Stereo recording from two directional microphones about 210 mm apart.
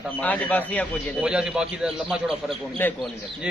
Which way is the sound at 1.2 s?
5° right (ahead or behind).